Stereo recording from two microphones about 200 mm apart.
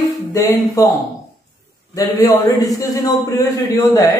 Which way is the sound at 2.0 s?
15° left (ahead or behind).